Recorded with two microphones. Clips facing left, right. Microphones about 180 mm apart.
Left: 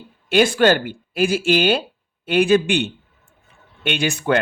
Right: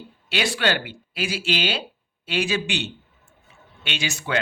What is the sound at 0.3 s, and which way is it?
A man's voice, 50° left (ahead or behind).